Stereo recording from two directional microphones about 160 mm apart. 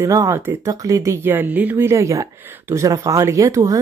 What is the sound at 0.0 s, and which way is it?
Speech, 20° right (ahead or behind).